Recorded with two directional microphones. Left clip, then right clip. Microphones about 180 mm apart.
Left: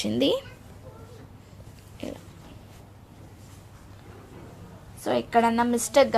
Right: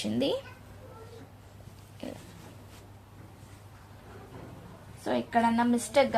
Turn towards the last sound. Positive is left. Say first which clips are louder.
# left 4 dB
turn(degrees=55)  # may be behind; listen again after turning